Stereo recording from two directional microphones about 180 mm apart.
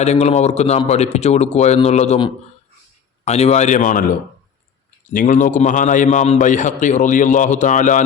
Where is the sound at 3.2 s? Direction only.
35° left (ahead or behind).